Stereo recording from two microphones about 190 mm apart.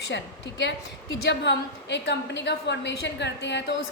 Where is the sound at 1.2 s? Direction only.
65° left (ahead or behind).